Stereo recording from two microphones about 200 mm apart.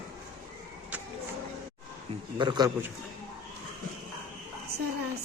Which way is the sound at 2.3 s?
20° right (ahead or behind).